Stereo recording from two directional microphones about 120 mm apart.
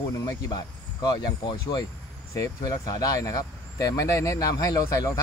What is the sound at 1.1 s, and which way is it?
Speech, 40° left (ahead or behind).